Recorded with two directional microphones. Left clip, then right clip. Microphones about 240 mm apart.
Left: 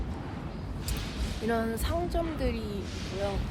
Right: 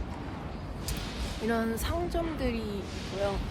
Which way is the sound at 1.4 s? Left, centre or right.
Centre.